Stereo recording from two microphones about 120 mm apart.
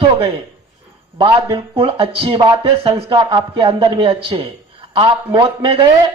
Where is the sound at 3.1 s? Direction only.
35° right (ahead or behind).